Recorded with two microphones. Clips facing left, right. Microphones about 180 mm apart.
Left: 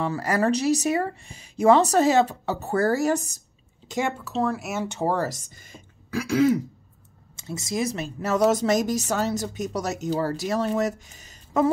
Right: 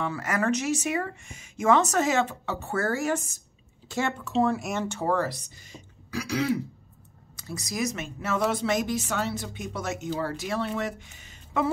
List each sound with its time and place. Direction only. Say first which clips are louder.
0.0 s speech: left 4 dB; 35° left (ahead or behind)
4.2 s speech: right 1 dB; centre (ahead or behind)
5.0 s speech: left 2 dB; 35° left (ahead or behind)
7.3 s speech: left 4 dB; 25° left (ahead or behind); by 11.7 s 40° left (ahead or behind)